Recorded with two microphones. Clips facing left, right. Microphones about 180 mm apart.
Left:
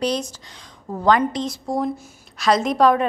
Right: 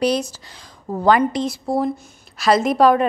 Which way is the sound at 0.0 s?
10° right (ahead or behind).